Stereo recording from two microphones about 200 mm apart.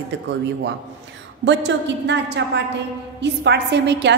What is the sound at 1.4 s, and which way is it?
A woman's voice, 60° right (ahead or behind).